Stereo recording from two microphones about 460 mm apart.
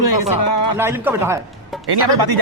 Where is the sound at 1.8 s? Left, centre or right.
Right.